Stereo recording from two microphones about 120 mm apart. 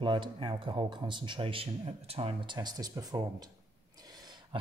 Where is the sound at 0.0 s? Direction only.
45° right (ahead or behind).